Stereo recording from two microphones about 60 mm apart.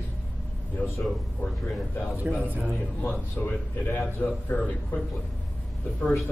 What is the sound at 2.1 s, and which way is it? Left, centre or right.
Speech, right.